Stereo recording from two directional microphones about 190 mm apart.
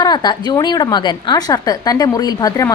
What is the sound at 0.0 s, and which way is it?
A woman's voice, 20° left (ahead or behind).